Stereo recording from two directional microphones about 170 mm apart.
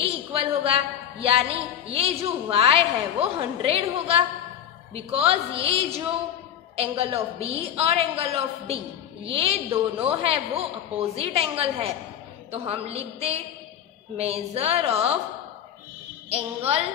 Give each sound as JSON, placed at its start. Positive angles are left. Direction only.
{"t": 0.0, "sound": "a woman's voice", "side_deg": -35}
{"t": 16.3, "sound": "a woman's voice", "side_deg": -35}